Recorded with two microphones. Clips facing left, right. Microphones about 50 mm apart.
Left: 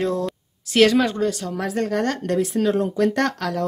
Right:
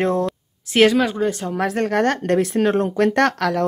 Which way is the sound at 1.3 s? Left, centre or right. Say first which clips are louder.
Right 2 dB; right.